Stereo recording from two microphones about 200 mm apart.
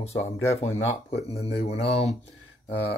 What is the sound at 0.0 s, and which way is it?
Speech, 30° left (ahead or behind).